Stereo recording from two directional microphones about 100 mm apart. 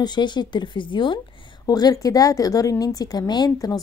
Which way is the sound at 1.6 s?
40° left (ahead or behind).